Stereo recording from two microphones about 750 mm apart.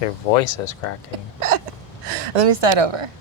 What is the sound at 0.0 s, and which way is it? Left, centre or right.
Speech, left.